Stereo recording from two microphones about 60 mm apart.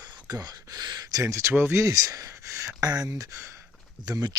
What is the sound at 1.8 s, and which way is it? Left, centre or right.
Speech, right.